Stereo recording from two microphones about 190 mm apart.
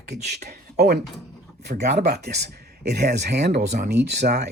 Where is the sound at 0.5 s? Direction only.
60° right (ahead or behind).